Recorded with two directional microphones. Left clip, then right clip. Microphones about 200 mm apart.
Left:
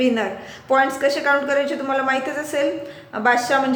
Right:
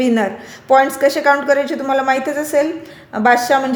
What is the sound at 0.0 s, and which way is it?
A woman's voice, 40° right (ahead or behind).